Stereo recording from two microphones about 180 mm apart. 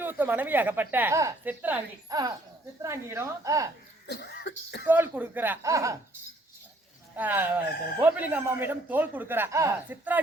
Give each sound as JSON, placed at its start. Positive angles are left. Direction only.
{"t": 0.0, "sound": "speech", "side_deg": -10}
{"t": 2.0, "sound": "speech", "side_deg": -20}
{"t": 4.0, "sound": "speech", "side_deg": 65}
{"t": 4.9, "sound": "speech", "side_deg": -10}
{"t": 7.2, "sound": "speech", "side_deg": -10}